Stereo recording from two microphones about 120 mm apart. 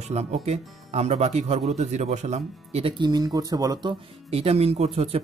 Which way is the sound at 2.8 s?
40° right (ahead or behind).